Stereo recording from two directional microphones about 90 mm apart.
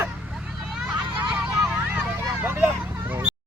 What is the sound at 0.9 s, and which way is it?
Hubbub, 20° right (ahead or behind).